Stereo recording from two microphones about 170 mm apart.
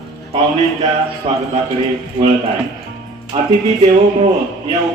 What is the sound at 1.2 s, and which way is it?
Speech, 35° right (ahead or behind).